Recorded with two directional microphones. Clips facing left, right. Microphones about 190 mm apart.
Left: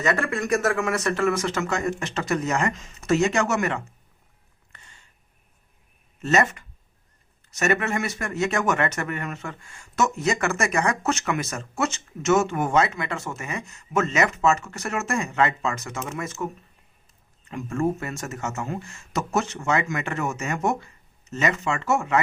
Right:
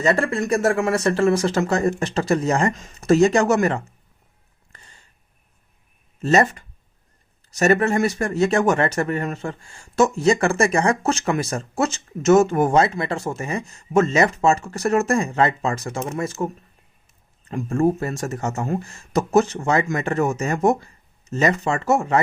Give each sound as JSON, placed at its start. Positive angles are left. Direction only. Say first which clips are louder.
{"t": 0.0, "sound": "speech", "louder": "right 4 dB", "side_deg": -30}
{"t": 4.7, "sound": "a sound", "louder": "right 2 dB", "side_deg": -35}
{"t": 6.2, "sound": "speech", "louder": "right 4 dB", "side_deg": -35}
{"t": 17.5, "sound": "speech", "louder": "right 5 dB", "side_deg": -30}